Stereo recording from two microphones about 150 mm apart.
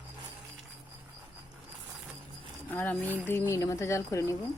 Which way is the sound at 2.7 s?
10° left (ahead or behind).